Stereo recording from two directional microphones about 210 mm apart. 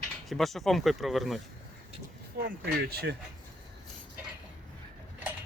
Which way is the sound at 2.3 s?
50° right (ahead or behind).